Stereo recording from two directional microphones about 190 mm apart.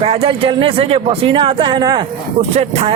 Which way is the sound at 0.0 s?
30° right (ahead or behind).